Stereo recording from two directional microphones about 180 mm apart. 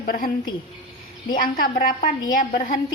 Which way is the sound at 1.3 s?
55° left (ahead or behind).